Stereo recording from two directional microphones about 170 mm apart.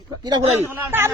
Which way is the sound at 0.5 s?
15° right (ahead or behind).